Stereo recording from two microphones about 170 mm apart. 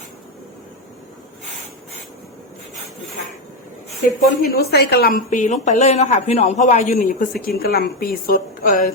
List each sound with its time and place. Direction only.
4.2 s a woman's voice: 65° left (ahead or behind)
7.4 s speech: 65° left (ahead or behind)